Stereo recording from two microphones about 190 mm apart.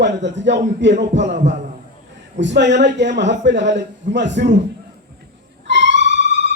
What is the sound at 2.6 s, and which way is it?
A man's voice, 65° right (ahead or behind).